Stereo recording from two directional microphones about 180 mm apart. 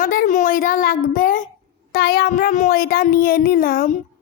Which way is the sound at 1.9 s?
55° left (ahead or behind).